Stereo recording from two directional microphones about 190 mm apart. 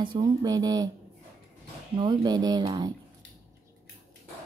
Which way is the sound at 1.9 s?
25° right (ahead or behind).